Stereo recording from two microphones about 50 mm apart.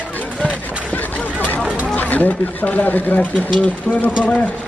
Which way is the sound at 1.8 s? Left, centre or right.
Left.